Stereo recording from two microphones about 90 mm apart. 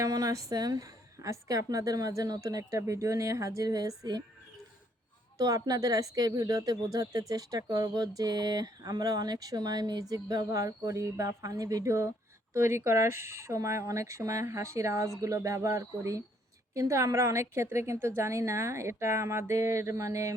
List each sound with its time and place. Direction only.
0.0 s speech: 40° right (ahead or behind)
5.4 s speech: 40° right (ahead or behind)